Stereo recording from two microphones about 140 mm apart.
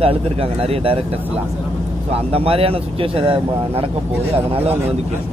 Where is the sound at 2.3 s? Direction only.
45° right (ahead or behind).